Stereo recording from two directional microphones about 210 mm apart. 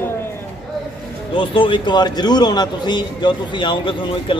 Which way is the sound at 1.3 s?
25° left (ahead or behind).